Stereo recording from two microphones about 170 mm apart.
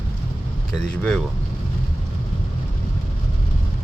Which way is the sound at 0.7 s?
5° left (ahead or behind).